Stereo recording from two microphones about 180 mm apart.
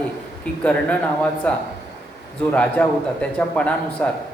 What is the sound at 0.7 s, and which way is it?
Speech, 5° left (ahead or behind).